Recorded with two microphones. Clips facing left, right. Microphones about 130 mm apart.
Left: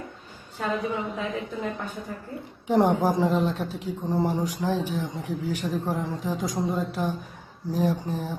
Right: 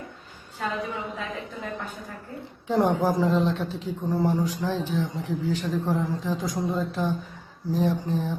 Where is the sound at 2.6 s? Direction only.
20° left (ahead or behind).